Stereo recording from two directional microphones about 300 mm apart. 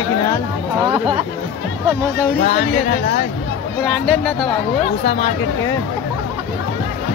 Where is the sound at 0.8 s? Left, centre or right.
Centre.